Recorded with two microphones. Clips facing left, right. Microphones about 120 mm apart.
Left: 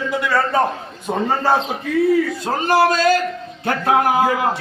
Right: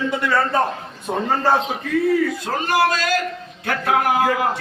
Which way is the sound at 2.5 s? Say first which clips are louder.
Left 2 dB; 30° left (ahead or behind).